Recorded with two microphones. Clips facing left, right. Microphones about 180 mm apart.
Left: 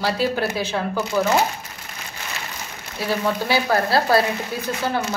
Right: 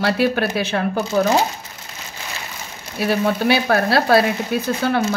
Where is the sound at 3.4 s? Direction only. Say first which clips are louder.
Right 3 dB; 65° right (ahead or behind).